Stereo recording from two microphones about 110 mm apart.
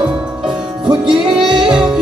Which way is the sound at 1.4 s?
5° right (ahead or behind).